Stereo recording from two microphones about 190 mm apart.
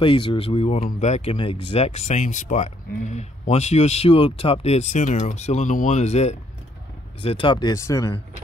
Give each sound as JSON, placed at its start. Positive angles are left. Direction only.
{"t": 0.0, "sound": "speech", "side_deg": 25}